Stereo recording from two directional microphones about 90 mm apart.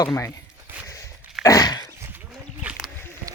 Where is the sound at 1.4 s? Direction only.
40° left (ahead or behind).